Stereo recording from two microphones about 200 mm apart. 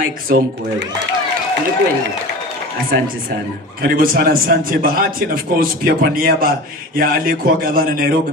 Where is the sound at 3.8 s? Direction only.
45° right (ahead or behind).